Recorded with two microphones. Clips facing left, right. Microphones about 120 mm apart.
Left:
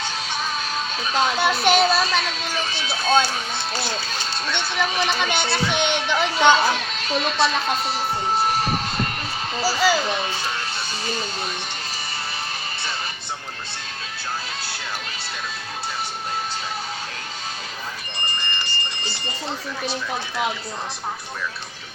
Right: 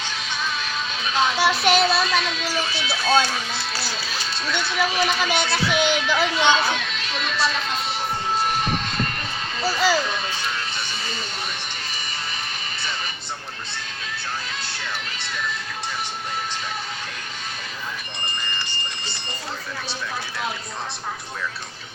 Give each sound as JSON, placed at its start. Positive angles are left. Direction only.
{"t": 1.4, "sound": "a child's voice", "side_deg": 0}
{"t": 2.9, "sound": "speech", "side_deg": 30}
{"t": 4.5, "sound": "a child's voice", "side_deg": -5}
{"t": 6.1, "sound": "speech", "side_deg": 35}
{"t": 9.6, "sound": "a child's voice", "side_deg": 0}